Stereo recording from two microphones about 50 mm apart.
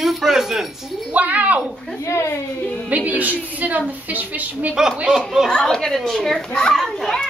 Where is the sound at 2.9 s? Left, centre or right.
Right.